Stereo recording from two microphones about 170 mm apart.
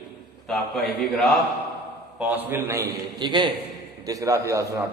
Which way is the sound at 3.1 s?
25° right (ahead or behind).